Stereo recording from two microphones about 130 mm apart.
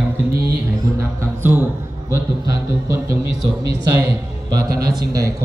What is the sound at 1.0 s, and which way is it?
Speech, 15° right (ahead or behind).